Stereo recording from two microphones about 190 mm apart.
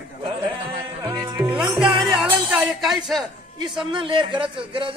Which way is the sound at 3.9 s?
25° right (ahead or behind).